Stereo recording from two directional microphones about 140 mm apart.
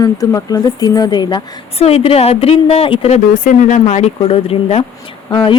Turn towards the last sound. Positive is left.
turn(degrees=35)  # may be behind; listen again after turning